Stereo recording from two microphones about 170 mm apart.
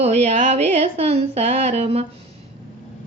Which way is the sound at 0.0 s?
40° right (ahead or behind).